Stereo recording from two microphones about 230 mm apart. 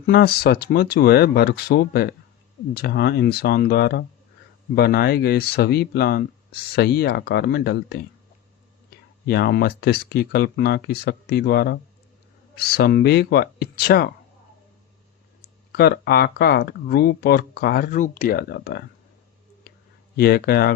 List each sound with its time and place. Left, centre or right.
0.0 s speech: left
9.2 s speech: left
15.7 s speech: left
20.1 s speech: left